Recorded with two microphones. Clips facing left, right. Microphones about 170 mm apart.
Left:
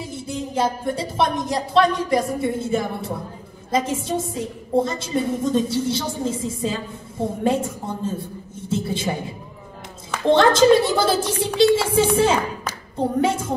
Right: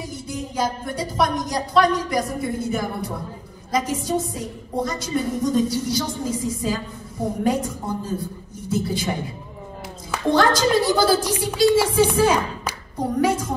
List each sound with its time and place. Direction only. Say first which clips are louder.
0.0 s a woman's voice: left 2 dB; 25° left (ahead or behind)
10.3 s a woman's voice: left 5 dB; 25° left (ahead or behind)